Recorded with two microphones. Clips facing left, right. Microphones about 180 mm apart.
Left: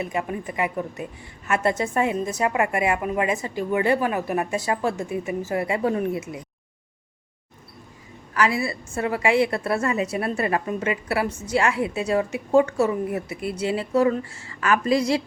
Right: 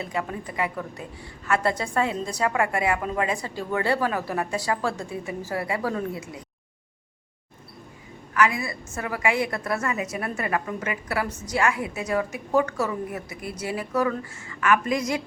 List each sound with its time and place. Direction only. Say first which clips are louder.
0.0 s a woman's voice: left 3 dB; 20° left (ahead or behind)
8.3 s a woman's voice: left 1 dB; 30° left (ahead or behind)